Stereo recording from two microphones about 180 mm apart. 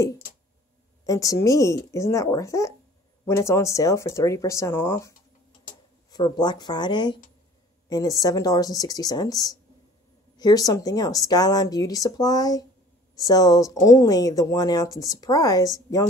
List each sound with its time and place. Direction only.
1.0 s speech: 20° left (ahead or behind)